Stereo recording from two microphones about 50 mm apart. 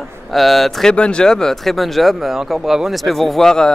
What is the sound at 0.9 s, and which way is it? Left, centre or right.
Speech, centre.